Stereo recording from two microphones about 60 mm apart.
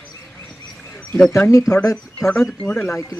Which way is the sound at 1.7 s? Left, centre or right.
Left.